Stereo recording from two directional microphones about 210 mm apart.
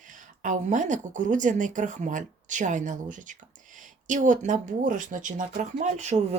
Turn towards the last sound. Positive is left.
turn(degrees=-30)  # may be behind; listen again after turning